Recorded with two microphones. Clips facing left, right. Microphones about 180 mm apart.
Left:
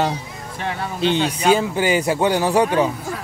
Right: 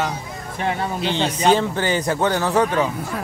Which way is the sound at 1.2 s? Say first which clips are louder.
Left 1 dB; 30° right (ahead or behind).